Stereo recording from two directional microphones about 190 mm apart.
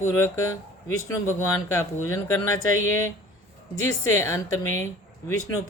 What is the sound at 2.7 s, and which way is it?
Speech, 90° left.